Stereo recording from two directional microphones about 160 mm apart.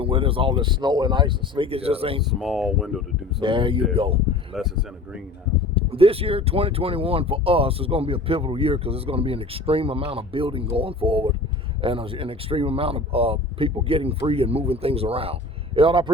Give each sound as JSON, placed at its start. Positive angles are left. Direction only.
{"t": 0.0, "sound": "speech", "side_deg": -35}
{"t": 2.2, "sound": "speech", "side_deg": 0}
{"t": 3.4, "sound": "speech", "side_deg": -30}
{"t": 4.5, "sound": "speech", "side_deg": -5}
{"t": 5.7, "sound": "speech", "side_deg": -35}